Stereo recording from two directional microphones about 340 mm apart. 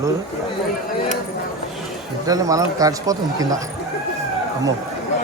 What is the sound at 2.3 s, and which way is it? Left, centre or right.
Speech, centre.